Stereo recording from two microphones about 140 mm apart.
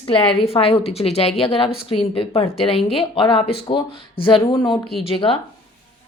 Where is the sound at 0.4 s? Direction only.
45° left (ahead or behind).